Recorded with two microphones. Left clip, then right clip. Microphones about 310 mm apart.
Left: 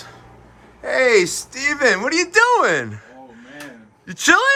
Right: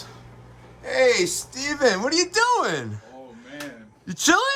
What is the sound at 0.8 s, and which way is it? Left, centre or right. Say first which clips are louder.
Speech: left 4 dB; centre.